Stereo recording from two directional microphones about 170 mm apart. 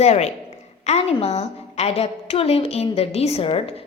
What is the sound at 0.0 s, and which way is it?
A woman's voice, 40° left (ahead or behind).